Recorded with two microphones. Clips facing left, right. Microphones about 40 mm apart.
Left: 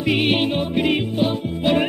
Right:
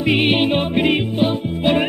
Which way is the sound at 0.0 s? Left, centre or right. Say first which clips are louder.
Right 3 dB; centre.